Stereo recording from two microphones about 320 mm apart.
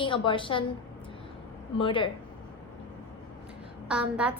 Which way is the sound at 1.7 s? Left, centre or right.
Centre.